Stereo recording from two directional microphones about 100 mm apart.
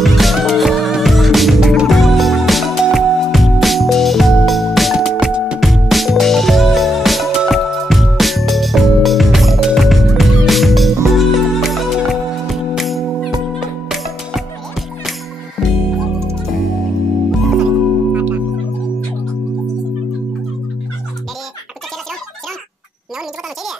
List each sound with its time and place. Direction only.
0.0 s music: centre (ahead or behind)
17.3 s music: centre (ahead or behind)
18.1 s music: 15° right (ahead or behind)